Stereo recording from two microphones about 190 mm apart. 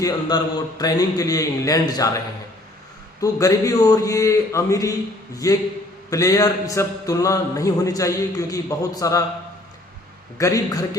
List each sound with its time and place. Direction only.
0.0 s a man's voice: 20° left (ahead or behind)
3.2 s mantra: 15° left (ahead or behind)
10.3 s mantra: 20° left (ahead or behind)